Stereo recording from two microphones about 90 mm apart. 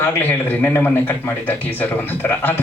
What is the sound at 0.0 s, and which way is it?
A man's voice, 25° left (ahead or behind).